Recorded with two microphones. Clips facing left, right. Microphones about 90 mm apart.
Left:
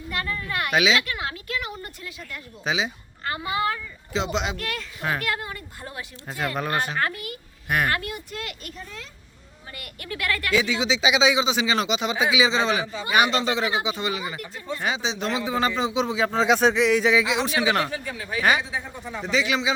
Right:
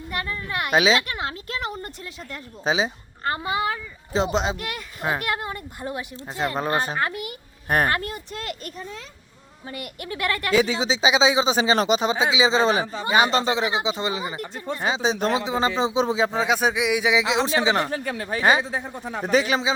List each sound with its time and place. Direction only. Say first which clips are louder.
0.1 s speech: even; 25° right (ahead or behind)
0.7 s a woman's voice: right 2 dB; 35° right (ahead or behind)
4.1 s speech: right 4 dB; 40° right (ahead or behind)
4.5 s speech: left 1 dB; 10° right (ahead or behind)
5.0 s speech: right 2 dB; 25° right (ahead or behind)
7.0 s speech: right 1 dB; 20° right (ahead or behind)
7.7 s speech: right 2 dB; 35° right (ahead or behind)
8.8 s speech: right 3 dB; 20° right (ahead or behind)
10.6 s speech: right 2 dB; 35° right (ahead or behind)
15.0 s a man's voice: right 5 dB; 45° right (ahead or behind)
15.4 s speech: right 1 dB; 25° right (ahead or behind)
16.4 s speech: left 3 dB; 5° right (ahead or behind)
17.2 s speech: right 2 dB; 30° right (ahead or behind)
17.9 s a man's voice: right 3 dB; 50° right (ahead or behind)